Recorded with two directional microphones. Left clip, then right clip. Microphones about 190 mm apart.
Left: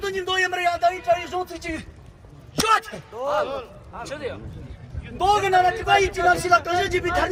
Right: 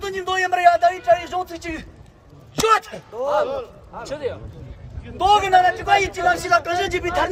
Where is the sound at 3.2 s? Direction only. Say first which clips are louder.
Right 3 dB; 55° right (ahead or behind).